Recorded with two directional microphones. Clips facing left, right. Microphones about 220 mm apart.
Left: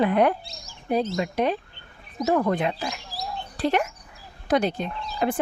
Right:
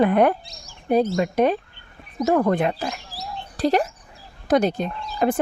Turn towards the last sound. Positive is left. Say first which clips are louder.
# right 4 dB
turn(degrees=-45)  # may be behind; listen again after turning